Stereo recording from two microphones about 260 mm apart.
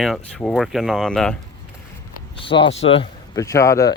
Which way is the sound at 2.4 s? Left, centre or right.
Centre.